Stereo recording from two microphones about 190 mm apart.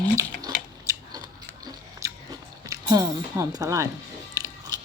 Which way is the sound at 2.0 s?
15° right (ahead or behind).